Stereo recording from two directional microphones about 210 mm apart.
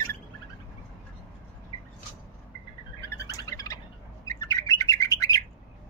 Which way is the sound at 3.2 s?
15° left (ahead or behind).